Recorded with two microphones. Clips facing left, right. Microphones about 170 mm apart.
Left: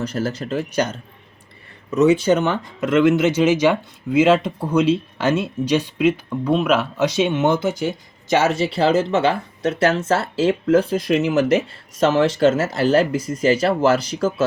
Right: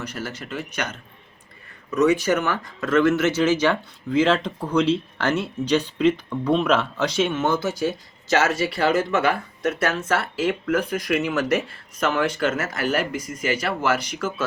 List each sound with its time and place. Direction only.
0.0 s speech: 35° left (ahead or behind)